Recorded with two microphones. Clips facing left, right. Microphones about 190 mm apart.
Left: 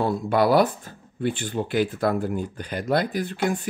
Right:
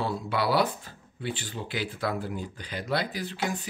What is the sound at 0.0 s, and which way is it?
Speech, 50° left (ahead or behind).